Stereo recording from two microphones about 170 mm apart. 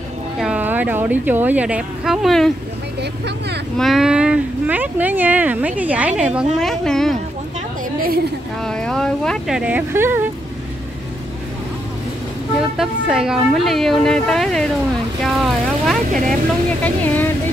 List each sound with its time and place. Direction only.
0.4 s speech: 10° right (ahead or behind)
3.0 s speech: 80° right
3.7 s speech: centre (ahead or behind)
8.6 s speech: 5° left (ahead or behind); by 10.2 s 15° right (ahead or behind)
12.7 s speech: 5° right (ahead or behind)
16.8 s speech: 10° left (ahead or behind)